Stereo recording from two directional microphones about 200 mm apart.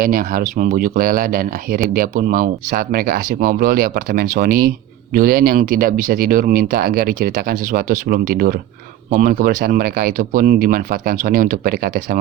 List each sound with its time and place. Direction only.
0.0 s speech: 45° right (ahead or behind)